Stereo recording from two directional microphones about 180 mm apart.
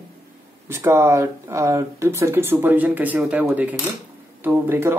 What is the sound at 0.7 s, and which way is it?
Speech, 15° right (ahead or behind).